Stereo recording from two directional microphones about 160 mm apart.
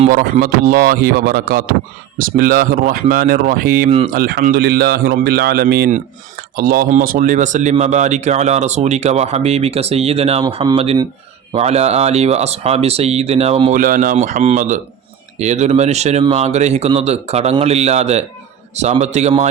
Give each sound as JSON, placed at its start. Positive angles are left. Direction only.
{"t": 0.1, "sound": "a man's voice", "side_deg": -65}
{"t": 3.8, "sound": "speech", "side_deg": -35}
{"t": 4.1, "sound": "a man's voice", "side_deg": -65}
{"t": 5.9, "sound": "a man's voice", "side_deg": -65}
{"t": 13.7, "sound": "speech", "side_deg": -60}